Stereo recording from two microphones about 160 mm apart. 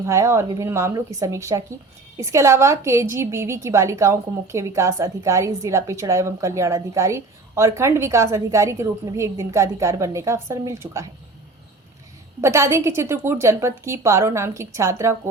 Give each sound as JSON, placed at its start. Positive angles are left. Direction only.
{"t": 0.0, "sound": "a woman's voice", "side_deg": -20}
{"t": 12.4, "sound": "a woman's voice", "side_deg": -20}